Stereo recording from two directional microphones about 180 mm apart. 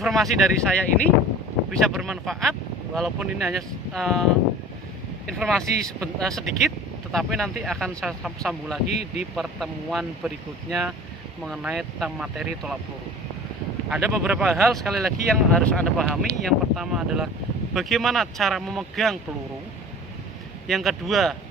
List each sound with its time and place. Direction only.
0.0 s speech: centre (ahead or behind)
5.4 s speech: centre (ahead or behind)
13.9 s speech: 5° right (ahead or behind)
20.7 s speech: centre (ahead or behind)